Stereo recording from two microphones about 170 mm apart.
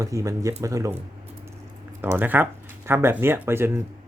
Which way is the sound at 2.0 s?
10° right (ahead or behind).